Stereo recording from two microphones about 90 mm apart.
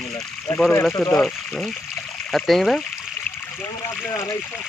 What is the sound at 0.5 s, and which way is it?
Speech, 25° left (ahead or behind).